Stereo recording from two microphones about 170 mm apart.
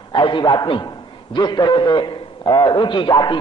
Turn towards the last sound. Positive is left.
turn(degrees=25)  # may be behind; listen again after turning